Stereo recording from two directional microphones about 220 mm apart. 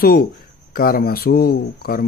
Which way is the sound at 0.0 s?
45° left (ahead or behind).